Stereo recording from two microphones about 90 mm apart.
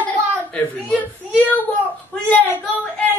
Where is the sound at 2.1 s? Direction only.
15° left (ahead or behind).